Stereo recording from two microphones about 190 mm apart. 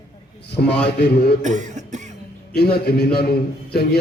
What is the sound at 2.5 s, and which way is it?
A man's voice, 55° left (ahead or behind).